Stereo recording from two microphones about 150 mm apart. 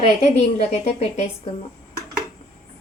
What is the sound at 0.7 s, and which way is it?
Speech, 45° left (ahead or behind).